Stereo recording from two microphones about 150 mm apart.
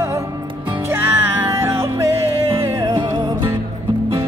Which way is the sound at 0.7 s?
15° right (ahead or behind).